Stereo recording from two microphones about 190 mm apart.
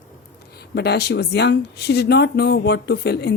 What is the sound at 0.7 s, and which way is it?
A woman's voice, 60° left (ahead or behind).